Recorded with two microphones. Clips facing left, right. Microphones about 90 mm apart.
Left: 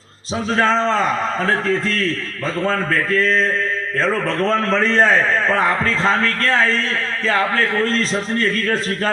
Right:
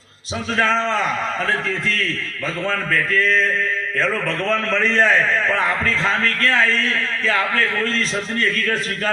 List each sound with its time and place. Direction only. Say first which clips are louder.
0.5 s a man's voice: left 2 dB; 35° left (ahead or behind)